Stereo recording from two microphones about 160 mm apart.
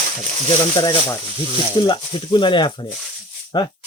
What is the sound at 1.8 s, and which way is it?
Speech, 30° left (ahead or behind).